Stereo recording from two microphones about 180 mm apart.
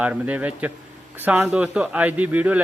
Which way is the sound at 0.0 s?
10° right (ahead or behind).